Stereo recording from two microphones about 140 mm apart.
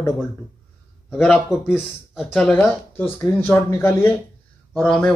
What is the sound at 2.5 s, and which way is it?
Speech, 15° left (ahead or behind).